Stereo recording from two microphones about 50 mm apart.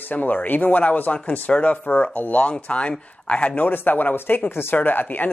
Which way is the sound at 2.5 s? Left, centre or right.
Left.